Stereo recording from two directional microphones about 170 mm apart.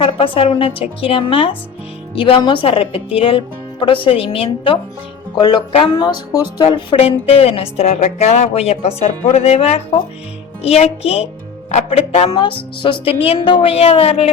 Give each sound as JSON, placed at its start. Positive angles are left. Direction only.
{"t": 0.0, "sound": "speech", "side_deg": 30}